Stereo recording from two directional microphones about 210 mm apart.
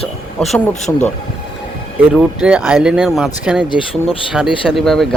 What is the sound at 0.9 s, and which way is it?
Speech, 10° left (ahead or behind).